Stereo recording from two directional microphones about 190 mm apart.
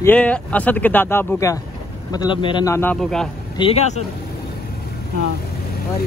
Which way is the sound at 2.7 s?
5° left (ahead or behind).